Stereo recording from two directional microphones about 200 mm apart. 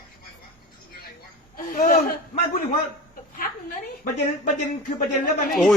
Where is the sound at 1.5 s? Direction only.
45° left (ahead or behind).